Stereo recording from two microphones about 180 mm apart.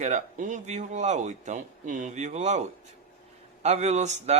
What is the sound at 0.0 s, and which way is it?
Speech, 45° right (ahead or behind).